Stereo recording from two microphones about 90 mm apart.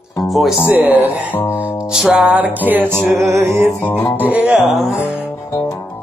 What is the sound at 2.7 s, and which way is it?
Speech, 20° right (ahead or behind).